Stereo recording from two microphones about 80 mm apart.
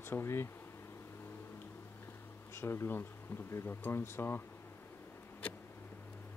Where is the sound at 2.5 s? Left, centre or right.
Left.